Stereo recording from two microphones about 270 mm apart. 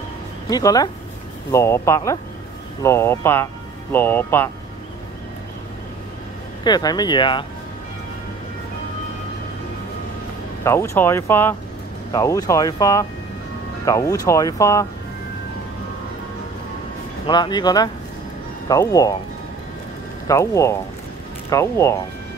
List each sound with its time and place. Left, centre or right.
0.5 s speech: centre
6.6 s speech: centre
10.6 s speech: centre
17.3 s speech: centre
20.2 s speech: centre